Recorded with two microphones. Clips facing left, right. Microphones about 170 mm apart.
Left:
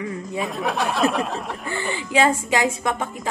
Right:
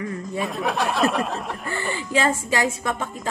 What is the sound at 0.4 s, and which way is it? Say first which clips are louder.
Speech: even; centre (ahead or behind).